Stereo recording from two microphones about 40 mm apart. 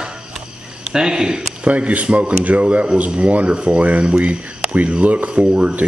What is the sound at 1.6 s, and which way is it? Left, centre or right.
Speech, right.